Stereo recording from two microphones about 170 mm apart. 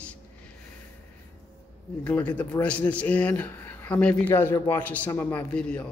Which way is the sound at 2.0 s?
10° left (ahead or behind).